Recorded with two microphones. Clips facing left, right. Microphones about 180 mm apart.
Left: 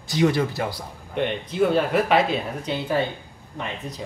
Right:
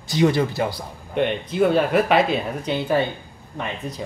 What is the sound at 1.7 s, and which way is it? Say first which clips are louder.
Speech: right 1 dB; 65° right (ahead or behind).